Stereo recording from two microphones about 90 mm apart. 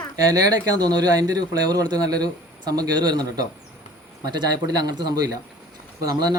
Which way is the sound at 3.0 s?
50° right (ahead or behind).